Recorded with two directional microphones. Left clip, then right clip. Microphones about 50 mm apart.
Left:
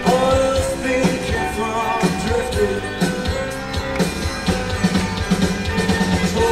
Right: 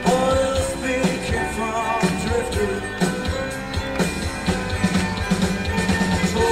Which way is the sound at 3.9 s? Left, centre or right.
Right.